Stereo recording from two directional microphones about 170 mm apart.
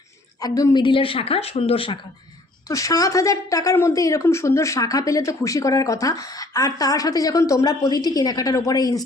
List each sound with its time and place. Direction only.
0.4 s a woman's voice: 20° left (ahead or behind)
2.6 s speech: 20° left (ahead or behind)